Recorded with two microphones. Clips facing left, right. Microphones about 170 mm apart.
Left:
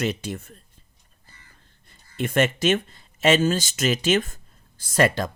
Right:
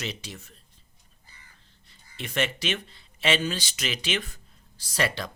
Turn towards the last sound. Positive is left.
turn(degrees=45)  # may be behind; listen again after turning